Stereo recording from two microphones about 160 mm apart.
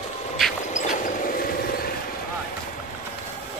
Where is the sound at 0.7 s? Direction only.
50° left (ahead or behind); by 1.9 s 65° left (ahead or behind).